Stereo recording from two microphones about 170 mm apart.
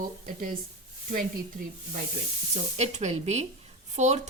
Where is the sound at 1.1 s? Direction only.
55° right (ahead or behind).